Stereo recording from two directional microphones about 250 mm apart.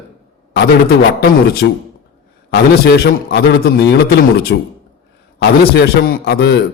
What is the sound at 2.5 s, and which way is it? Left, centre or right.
A man's voice, left.